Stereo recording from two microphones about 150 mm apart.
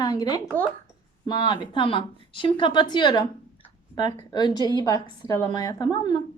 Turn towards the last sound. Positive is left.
turn(degrees=30)  # may be behind; listen again after turning